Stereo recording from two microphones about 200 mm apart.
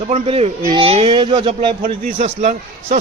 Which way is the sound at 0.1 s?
30° right (ahead or behind).